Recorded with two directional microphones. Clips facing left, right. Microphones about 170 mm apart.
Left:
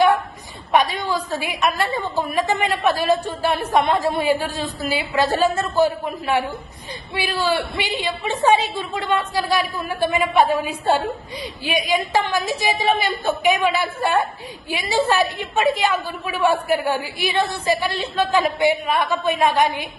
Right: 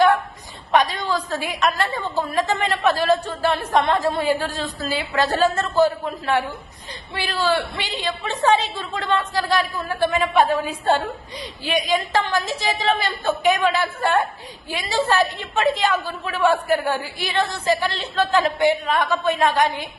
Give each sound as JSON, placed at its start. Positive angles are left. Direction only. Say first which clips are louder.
{"t": 0.7, "sound": "a woman's voice", "louder": "even", "side_deg": 10}